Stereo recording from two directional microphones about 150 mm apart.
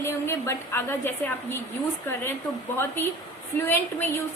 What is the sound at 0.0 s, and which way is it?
A woman's voice, 15° left (ahead or behind).